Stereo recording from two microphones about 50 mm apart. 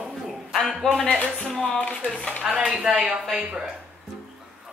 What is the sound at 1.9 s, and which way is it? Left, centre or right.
Speech, left.